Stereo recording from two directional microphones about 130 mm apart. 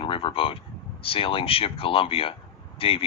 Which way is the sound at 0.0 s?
40° left (ahead or behind).